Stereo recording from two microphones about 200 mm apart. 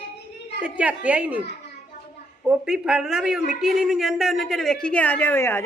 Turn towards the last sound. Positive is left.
turn(degrees=10)  # may be behind; listen again after turning